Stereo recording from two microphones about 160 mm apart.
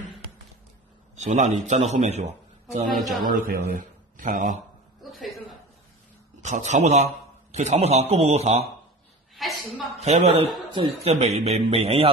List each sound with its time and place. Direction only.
1.1 s a man's voice: 50° right (ahead or behind)
3.0 s a man's voice: centre (ahead or behind)
3.3 s speech: 60° right (ahead or behind)
5.0 s a sound: centre (ahead or behind)
6.4 s a man's voice: 50° right (ahead or behind)
9.3 s a sound: centre (ahead or behind)
9.9 s speech: 40° right (ahead or behind)